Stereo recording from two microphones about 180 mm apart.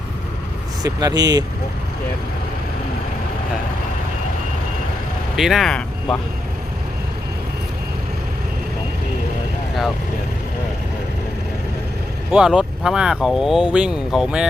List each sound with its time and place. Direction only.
0.8 s speech: 20° right (ahead or behind)
5.4 s speech: centre (ahead or behind)
12.3 s speech: 5° right (ahead or behind)